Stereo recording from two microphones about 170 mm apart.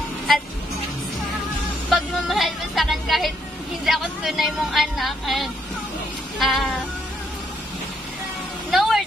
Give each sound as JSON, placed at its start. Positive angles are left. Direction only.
{"t": 2.0, "sound": "music", "side_deg": 0}
{"t": 3.8, "sound": "speech", "side_deg": 0}
{"t": 8.7, "sound": "a sound", "side_deg": 0}